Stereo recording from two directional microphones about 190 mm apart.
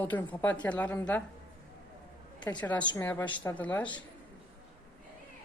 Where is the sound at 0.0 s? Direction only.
10° left (ahead or behind).